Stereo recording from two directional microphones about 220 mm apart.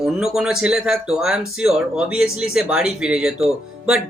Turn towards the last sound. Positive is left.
turn(degrees=-5)  # may be behind; listen again after turning